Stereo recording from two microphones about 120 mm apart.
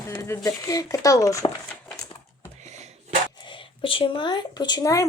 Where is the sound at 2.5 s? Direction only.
70° right (ahead or behind).